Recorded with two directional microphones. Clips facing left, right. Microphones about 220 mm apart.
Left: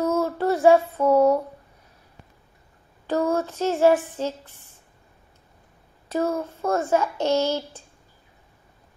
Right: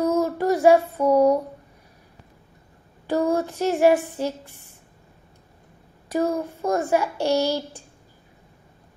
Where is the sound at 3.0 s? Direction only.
15° right (ahead or behind).